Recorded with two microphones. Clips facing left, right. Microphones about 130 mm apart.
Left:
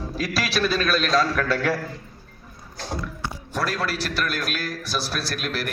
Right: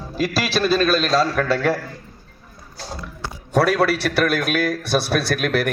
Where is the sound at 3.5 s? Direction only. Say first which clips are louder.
Right 10 dB; 65° right (ahead or behind).